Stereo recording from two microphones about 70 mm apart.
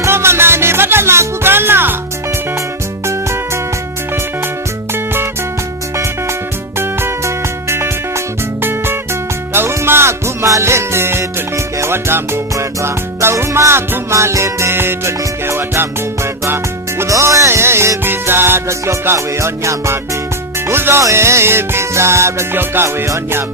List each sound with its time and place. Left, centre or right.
0.0 s music: right
6.7 s music: right
9.5 s music: right
17.1 s music: right
22.5 s music: right